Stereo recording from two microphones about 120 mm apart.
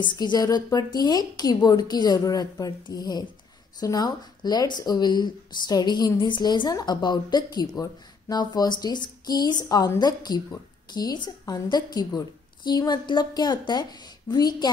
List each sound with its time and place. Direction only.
0.0 s speech: 35° left (ahead or behind)